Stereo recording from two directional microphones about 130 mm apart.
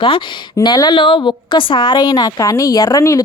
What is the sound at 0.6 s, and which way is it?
A woman's voice, 30° left (ahead or behind).